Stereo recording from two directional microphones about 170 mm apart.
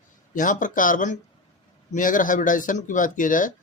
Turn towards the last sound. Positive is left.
turn(degrees=50)  # may be behind; listen again after turning